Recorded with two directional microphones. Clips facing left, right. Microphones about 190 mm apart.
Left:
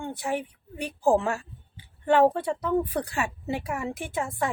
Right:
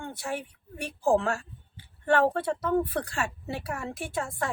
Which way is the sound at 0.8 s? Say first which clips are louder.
Left 2 dB; 15° left (ahead or behind).